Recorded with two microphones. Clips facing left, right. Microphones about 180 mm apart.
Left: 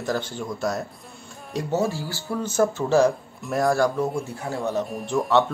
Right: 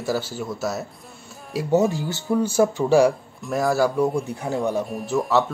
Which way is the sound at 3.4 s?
Centre (ahead or behind).